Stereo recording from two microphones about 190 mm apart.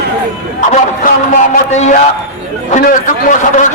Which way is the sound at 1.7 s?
35° left (ahead or behind).